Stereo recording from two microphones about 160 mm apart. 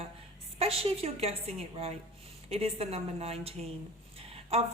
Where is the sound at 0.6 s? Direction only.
35° right (ahead or behind).